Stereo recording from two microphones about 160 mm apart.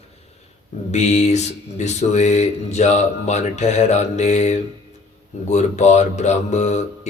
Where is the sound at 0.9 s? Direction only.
45° left (ahead or behind).